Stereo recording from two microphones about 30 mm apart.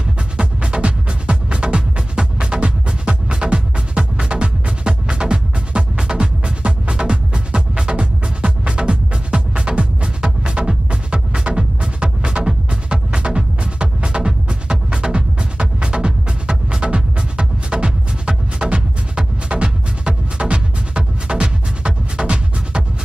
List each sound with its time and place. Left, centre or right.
0.4 s music: right